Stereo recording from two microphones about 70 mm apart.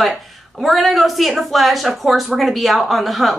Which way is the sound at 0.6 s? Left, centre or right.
Centre.